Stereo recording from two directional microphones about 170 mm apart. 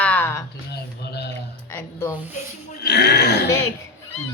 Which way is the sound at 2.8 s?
75° left (ahead or behind).